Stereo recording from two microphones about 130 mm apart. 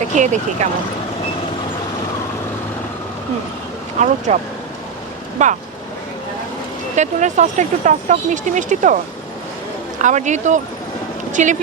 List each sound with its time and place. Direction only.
0.1 s speech: 65° right (ahead or behind)
4.0 s speech: 65° right (ahead or behind)
5.4 s speech: 65° right (ahead or behind)
6.9 s speech: 65° right (ahead or behind)
10.0 s speech: 70° right (ahead or behind)